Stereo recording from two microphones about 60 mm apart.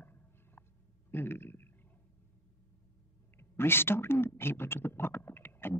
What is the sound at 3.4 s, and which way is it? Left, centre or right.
Speech, left.